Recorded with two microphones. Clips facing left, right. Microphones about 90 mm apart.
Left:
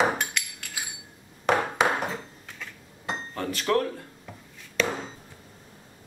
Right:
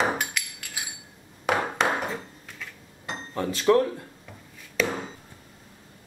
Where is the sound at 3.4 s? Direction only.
25° right (ahead or behind).